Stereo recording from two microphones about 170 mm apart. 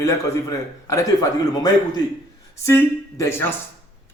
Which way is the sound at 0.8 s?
20° left (ahead or behind).